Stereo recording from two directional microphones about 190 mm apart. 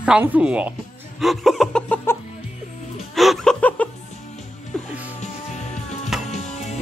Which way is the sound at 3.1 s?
Centre (ahead or behind).